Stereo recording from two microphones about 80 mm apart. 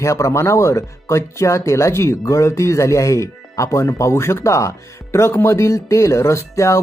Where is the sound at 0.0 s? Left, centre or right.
Left.